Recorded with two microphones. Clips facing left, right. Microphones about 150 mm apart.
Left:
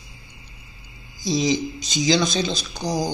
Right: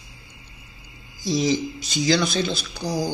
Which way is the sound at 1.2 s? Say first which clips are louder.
Even; 15° left (ahead or behind).